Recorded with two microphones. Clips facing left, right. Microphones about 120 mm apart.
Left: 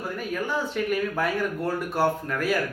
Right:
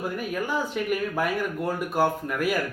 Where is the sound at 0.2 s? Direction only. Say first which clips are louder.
Left 2 dB; 10° right (ahead or behind).